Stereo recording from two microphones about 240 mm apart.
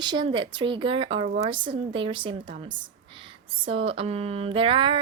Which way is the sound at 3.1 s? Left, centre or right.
Right.